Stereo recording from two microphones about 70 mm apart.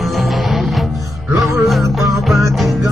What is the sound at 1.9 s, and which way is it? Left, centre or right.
Music, centre.